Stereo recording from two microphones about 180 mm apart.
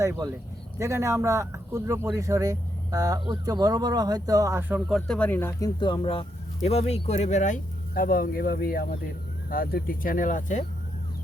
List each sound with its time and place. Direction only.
0.0 s speech: 15° right (ahead or behind)
4.9 s speech: centre (ahead or behind); by 10.7 s 45° left (ahead or behind)